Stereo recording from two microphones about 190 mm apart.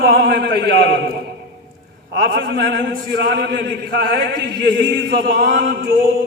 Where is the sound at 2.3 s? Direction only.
60° right (ahead or behind).